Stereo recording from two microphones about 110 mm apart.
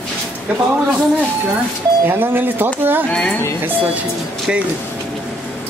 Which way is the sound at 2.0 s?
20° right (ahead or behind).